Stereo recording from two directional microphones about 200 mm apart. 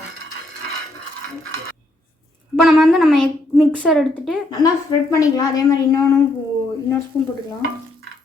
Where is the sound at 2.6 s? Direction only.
Centre (ahead or behind).